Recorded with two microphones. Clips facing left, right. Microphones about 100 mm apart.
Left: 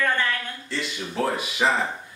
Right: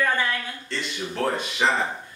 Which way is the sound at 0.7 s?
5° left (ahead or behind).